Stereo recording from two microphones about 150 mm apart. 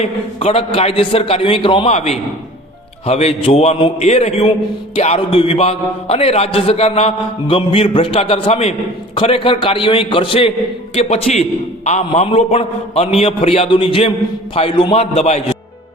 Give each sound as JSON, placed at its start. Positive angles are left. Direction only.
{"t": 0.0, "sound": "a man's voice", "side_deg": 40}